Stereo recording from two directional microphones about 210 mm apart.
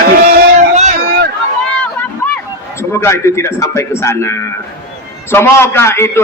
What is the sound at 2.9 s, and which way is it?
A man's voice, 10° left (ahead or behind).